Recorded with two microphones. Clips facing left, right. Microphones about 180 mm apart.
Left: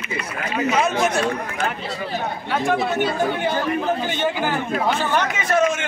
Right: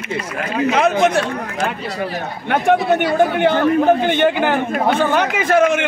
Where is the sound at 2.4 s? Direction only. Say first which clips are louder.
Right 7 dB; 65° right (ahead or behind).